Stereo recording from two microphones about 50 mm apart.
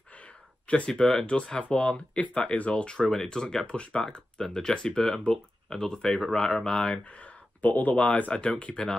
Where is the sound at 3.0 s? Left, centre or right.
Centre.